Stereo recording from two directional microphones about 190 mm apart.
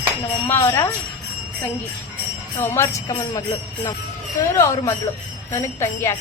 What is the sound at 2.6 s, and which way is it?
Jingle bell, 15° left (ahead or behind).